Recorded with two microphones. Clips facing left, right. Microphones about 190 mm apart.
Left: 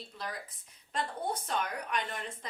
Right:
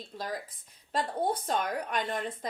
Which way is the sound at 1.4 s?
35° right (ahead or behind).